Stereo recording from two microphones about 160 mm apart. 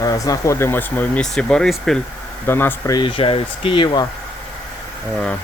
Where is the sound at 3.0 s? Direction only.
35° left (ahead or behind).